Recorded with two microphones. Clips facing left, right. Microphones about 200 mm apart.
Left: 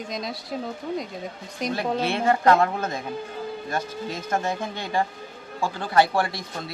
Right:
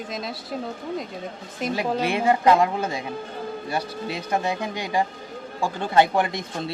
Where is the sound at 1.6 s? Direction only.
10° right (ahead or behind).